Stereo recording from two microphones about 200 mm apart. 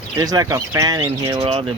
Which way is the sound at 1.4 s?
30° right (ahead or behind).